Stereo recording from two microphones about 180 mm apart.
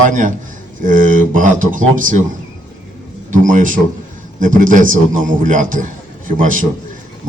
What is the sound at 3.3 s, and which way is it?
Speech, 45° right (ahead or behind).